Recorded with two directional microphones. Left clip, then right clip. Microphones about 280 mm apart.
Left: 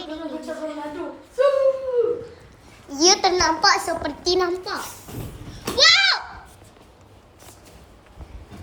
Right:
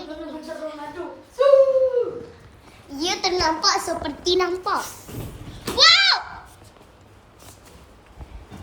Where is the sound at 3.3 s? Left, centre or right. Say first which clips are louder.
Left 2 dB; centre.